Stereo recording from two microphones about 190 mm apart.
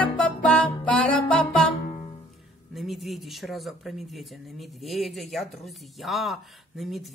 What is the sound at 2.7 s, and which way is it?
Speech, centre (ahead or behind).